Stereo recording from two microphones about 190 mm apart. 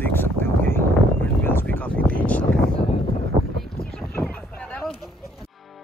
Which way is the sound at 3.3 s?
35° right (ahead or behind).